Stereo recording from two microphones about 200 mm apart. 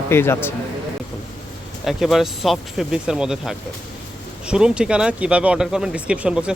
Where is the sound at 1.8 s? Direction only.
Centre (ahead or behind).